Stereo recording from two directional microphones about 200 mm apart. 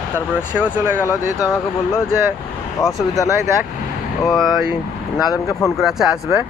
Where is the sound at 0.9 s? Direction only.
15° left (ahead or behind).